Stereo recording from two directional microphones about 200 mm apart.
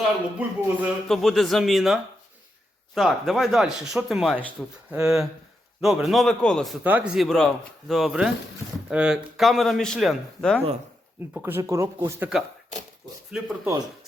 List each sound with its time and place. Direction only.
0.0 s a man's voice: 5° right (ahead or behind)
4.9 s speech: 15° right (ahead or behind)
5.8 s a man's voice: centre (ahead or behind)
11.3 s a man's voice: 10° right (ahead or behind)